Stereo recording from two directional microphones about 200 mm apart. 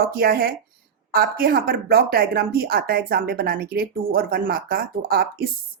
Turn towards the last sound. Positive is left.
turn(degrees=-50)  # may be behind; listen again after turning